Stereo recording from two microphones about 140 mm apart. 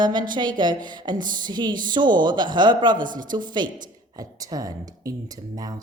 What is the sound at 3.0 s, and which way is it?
Speech, 70° right (ahead or behind).